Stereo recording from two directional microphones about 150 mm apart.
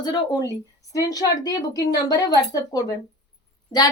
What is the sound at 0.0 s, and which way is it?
A woman's voice, 25° left (ahead or behind).